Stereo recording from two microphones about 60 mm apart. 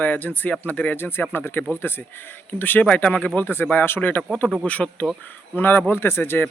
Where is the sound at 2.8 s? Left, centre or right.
Left.